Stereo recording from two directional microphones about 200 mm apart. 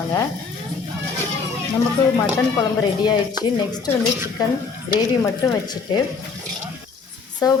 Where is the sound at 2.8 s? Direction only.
20° left (ahead or behind).